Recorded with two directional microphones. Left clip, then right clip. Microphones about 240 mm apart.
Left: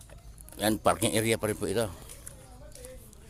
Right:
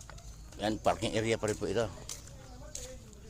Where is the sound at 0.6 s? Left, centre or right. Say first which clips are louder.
Left 5 dB; left.